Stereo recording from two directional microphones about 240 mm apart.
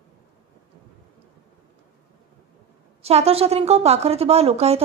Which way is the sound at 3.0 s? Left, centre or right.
Right.